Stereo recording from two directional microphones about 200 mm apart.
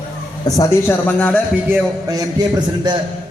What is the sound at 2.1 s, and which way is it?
Speech, 15° right (ahead or behind).